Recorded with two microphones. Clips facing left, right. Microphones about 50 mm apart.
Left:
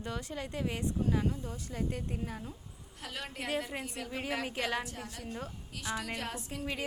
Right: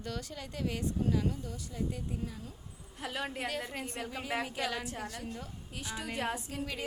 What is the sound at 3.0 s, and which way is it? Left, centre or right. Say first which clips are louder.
Speech: right 4 dB; centre.